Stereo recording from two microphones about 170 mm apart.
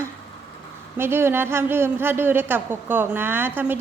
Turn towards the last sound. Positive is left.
turn(degrees=-10)  # may be behind; listen again after turning